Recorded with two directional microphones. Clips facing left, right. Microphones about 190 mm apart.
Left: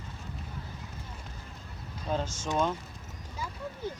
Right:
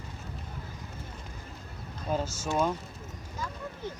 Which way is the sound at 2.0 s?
5° right (ahead or behind).